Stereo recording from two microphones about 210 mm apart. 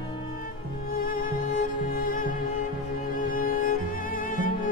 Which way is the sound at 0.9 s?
40° left (ahead or behind).